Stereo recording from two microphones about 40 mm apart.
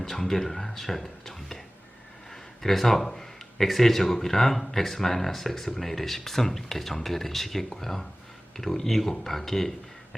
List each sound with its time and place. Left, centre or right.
0.0 s speech: centre
2.3 s a sound: centre
3.1 s speech: centre